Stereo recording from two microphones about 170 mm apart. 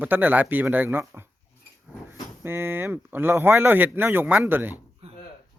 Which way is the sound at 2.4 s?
15° right (ahead or behind).